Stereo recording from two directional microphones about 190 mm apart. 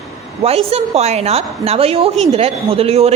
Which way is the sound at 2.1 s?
Centre (ahead or behind).